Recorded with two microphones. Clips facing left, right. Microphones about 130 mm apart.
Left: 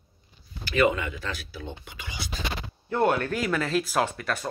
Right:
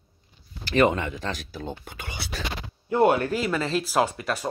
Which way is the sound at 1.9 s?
55° right (ahead or behind).